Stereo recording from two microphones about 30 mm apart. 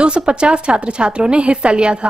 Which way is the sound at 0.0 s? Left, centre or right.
Right.